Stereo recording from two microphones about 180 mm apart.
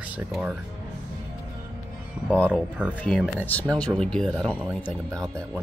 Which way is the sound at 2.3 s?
10° left (ahead or behind).